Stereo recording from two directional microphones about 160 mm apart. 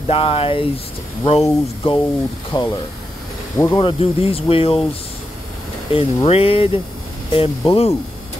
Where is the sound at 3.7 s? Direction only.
35° left (ahead or behind).